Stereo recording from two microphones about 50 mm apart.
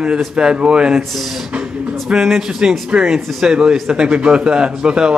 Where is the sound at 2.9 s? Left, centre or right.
Right.